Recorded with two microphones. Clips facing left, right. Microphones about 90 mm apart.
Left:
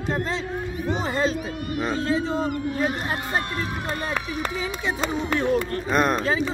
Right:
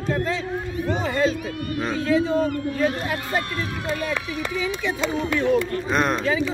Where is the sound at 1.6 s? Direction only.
15° left (ahead or behind).